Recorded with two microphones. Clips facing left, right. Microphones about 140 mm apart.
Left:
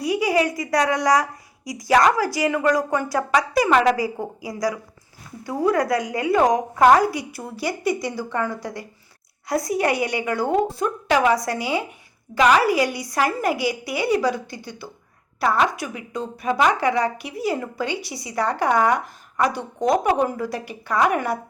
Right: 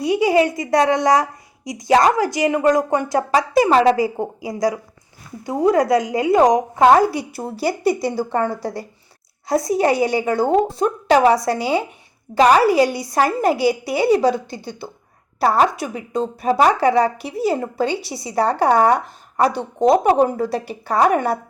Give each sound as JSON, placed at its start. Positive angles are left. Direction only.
{"t": 0.0, "sound": "a woman's voice", "side_deg": -25}